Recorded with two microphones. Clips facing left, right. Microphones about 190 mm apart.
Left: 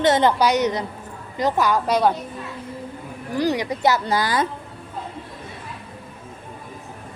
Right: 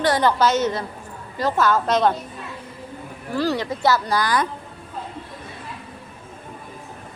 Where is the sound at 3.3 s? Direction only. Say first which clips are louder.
Left 1 dB; 15° left (ahead or behind).